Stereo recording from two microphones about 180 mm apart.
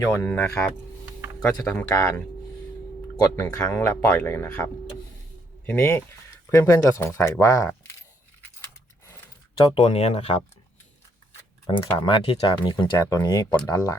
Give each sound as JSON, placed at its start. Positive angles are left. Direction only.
{"t": 0.1, "sound": "speech", "side_deg": 15}
{"t": 3.3, "sound": "speech", "side_deg": 5}
{"t": 9.6, "sound": "speech", "side_deg": 25}
{"t": 9.8, "sound": "speech", "side_deg": 35}
{"t": 11.7, "sound": "speech", "side_deg": 25}
{"t": 12.7, "sound": "speech", "side_deg": 20}